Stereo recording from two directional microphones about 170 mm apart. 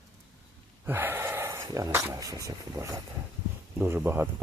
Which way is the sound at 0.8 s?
10° right (ahead or behind).